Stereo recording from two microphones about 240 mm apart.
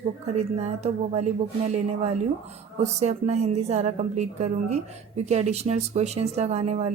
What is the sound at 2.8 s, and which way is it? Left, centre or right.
A woman's voice, right.